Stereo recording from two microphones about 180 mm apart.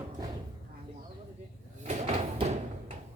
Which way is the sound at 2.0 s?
35° right (ahead or behind).